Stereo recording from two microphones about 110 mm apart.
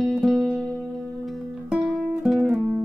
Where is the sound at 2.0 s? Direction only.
Centre (ahead or behind).